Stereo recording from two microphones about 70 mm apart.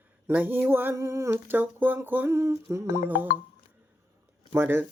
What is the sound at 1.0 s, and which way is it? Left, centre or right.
Music, right.